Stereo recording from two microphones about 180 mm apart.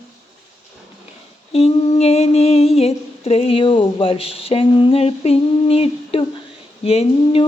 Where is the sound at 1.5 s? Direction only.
35° left (ahead or behind).